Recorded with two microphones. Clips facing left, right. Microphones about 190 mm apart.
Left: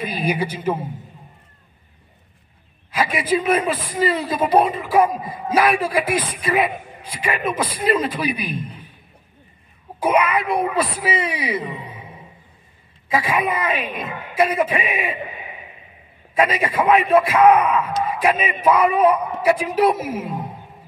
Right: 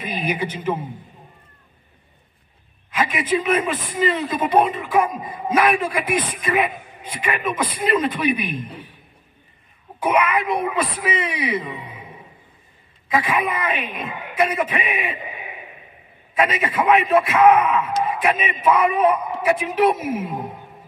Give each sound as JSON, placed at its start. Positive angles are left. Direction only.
{"t": 0.0, "sound": "a man's voice", "side_deg": 35}
{"t": 2.9, "sound": "a man's voice", "side_deg": 35}
{"t": 10.0, "sound": "a man's voice", "side_deg": 30}
{"t": 13.1, "sound": "a man's voice", "side_deg": 30}
{"t": 16.3, "sound": "a man's voice", "side_deg": 35}